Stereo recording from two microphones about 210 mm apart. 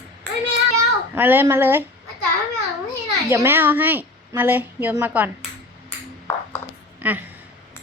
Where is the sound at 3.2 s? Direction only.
10° right (ahead or behind).